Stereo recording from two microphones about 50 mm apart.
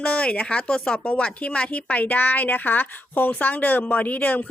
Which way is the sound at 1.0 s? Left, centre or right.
Left.